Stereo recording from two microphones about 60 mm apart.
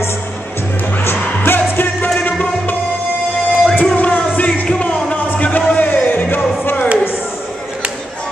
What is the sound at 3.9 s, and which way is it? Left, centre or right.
Music, left.